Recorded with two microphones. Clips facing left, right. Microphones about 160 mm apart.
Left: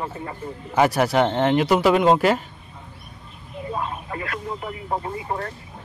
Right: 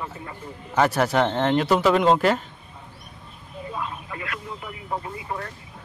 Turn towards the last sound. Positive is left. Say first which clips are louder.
# left 4 dB
turn(degrees=40)  # may be behind; listen again after turning